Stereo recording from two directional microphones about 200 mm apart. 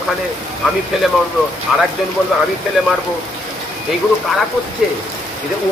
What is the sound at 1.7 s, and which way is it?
Speech, centre (ahead or behind).